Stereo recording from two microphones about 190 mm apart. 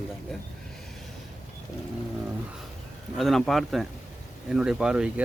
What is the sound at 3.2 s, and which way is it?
Speech, centre (ahead or behind).